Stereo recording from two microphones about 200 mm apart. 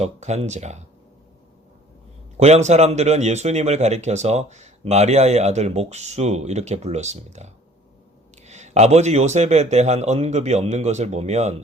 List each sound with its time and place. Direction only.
0.0 s speech: 35° right (ahead or behind)
2.4 s speech: 35° right (ahead or behind)